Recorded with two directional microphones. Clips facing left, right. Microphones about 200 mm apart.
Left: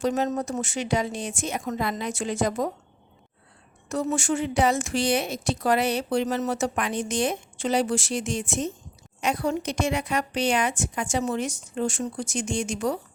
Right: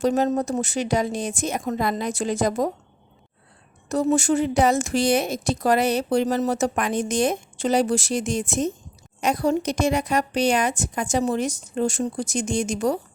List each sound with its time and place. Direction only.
0.0 s a woman's voice: 35° right (ahead or behind)
3.8 s a woman's voice: 35° right (ahead or behind)